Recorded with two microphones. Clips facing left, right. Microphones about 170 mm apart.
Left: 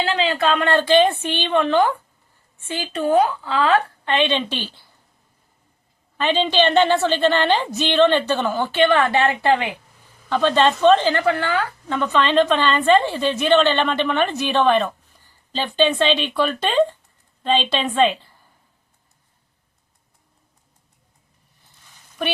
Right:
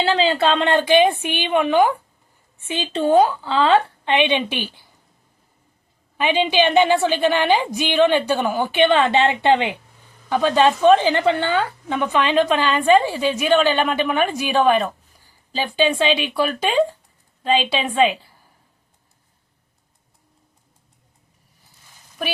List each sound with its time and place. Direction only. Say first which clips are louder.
0.0 s a woman's voice: right 2 dB; 35° right (ahead or behind); by 4.9 s 15° right (ahead or behind)
6.1 s a woman's voice: right 1 dB; 10° right (ahead or behind)
10.2 s a woman's voice: right 1 dB; 10° right (ahead or behind)
22.2 s speech: left 2 dB; 5° right (ahead or behind)